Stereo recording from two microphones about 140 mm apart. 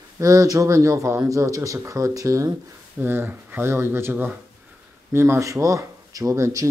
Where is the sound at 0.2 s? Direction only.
25° right (ahead or behind).